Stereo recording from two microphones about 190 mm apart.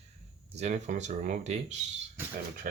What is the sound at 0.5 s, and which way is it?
Speech, 35° right (ahead or behind).